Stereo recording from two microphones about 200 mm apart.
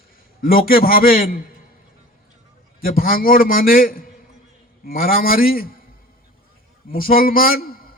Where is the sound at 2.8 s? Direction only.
45° left (ahead or behind).